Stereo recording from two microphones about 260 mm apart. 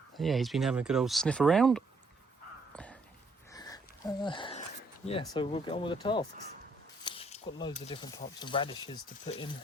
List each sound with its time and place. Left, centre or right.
0.2 s speech: centre
2.7 s a sound: centre
5.0 s speech: centre